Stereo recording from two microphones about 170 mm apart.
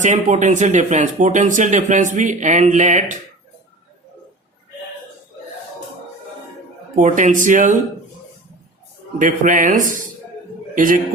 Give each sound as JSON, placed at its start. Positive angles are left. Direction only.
{"t": 0.0, "sound": "speech", "side_deg": -45}
{"t": 6.9, "sound": "speech", "side_deg": -45}
{"t": 9.1, "sound": "speech", "side_deg": -50}